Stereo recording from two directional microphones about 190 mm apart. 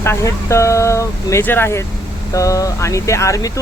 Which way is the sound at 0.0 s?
15° left (ahead or behind).